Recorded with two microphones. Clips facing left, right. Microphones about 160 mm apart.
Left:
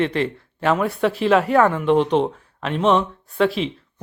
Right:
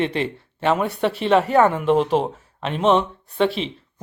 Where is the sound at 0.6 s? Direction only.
Centre (ahead or behind).